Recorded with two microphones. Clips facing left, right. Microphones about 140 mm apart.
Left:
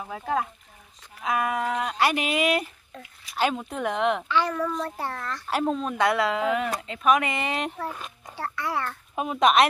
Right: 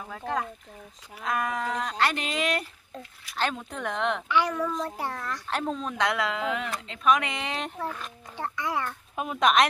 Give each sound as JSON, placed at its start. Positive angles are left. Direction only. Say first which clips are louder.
{"t": 0.1, "sound": "speech", "louder": "left 3 dB", "side_deg": 10}
{"t": 4.3, "sound": "speech", "louder": "even", "side_deg": -15}
{"t": 4.6, "sound": "speech", "louder": "left 1 dB", "side_deg": 0}
{"t": 4.8, "sound": "speech", "louder": "left 1 dB", "side_deg": -15}
{"t": 5.5, "sound": "speech", "louder": "left 5 dB", "side_deg": 5}
{"t": 8.4, "sound": "speech", "louder": "left 1 dB", "side_deg": -15}
{"t": 9.1, "sound": "speech", "louder": "left 3 dB", "side_deg": 0}